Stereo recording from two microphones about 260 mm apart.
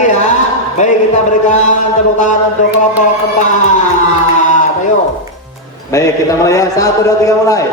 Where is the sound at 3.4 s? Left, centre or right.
Left.